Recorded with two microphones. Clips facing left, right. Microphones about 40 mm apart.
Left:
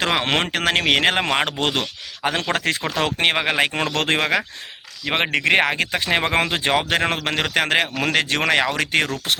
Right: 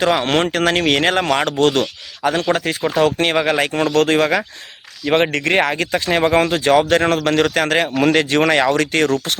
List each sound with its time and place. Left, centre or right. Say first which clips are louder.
0.0 s speech: right 4 dB; left
0.4 s speech: right 3 dB; centre
1.1 s speech: right 4 dB; left
2.2 s speech: right 4 dB; left
2.8 s speech: right 6 dB; left
3.2 s speech: right 2 dB; left
6.9 s speech: right 6 dB; centre
7.9 s speech: right 6 dB; centre